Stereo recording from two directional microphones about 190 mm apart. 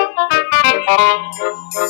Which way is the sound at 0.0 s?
60° left (ahead or behind).